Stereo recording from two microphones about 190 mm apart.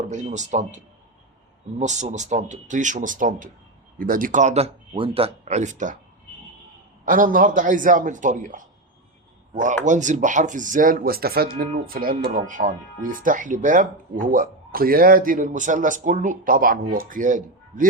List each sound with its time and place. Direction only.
0.1 s speech: 40° right (ahead or behind)
7.0 s speech: 45° right (ahead or behind)